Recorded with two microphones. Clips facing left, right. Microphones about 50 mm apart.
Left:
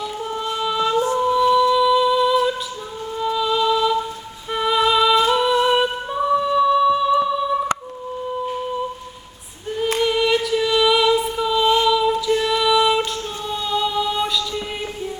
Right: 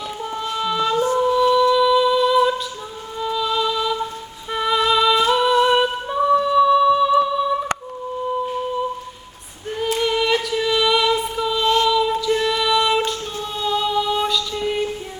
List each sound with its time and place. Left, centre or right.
0.3 s music: centre
4.5 s humming: centre
5.6 s music: centre
10.0 s music: centre
14.3 s mantra: centre